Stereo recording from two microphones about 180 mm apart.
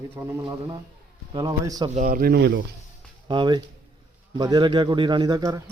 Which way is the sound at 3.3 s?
25° right (ahead or behind).